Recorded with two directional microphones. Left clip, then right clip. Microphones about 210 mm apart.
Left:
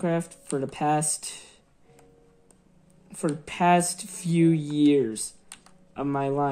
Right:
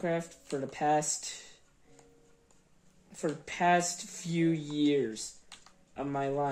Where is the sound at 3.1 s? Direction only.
50° left (ahead or behind).